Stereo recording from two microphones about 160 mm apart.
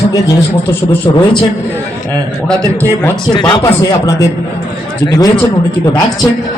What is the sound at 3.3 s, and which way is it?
A man's voice, 25° left (ahead or behind).